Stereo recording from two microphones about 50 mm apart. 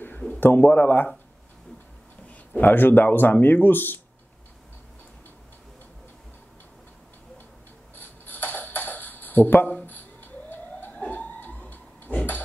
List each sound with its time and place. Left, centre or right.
0.4 s a man's voice: left
2.2 s speech: left
7.9 s a sound: left